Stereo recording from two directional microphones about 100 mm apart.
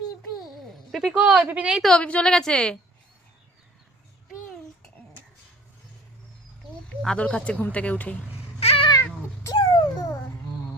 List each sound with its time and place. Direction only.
0.9 s a sound: centre (ahead or behind)
1.2 s speech: 10° right (ahead or behind)
1.8 s speech: 10° left (ahead or behind)
6.8 s speech: 10° left (ahead or behind)
8.6 s babbling: 75° left (ahead or behind)
9.6 s a sound: 60° left (ahead or behind)